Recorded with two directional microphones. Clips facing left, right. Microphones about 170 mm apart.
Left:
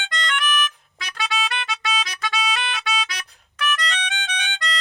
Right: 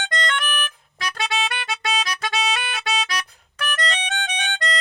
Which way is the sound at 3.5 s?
40° right (ahead or behind).